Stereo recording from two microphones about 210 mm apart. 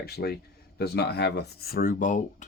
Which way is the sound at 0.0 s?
50° left (ahead or behind).